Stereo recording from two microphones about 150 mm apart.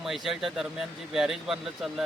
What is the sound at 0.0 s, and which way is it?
Speech, centre (ahead or behind).